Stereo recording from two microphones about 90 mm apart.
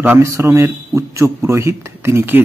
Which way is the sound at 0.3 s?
35° right (ahead or behind).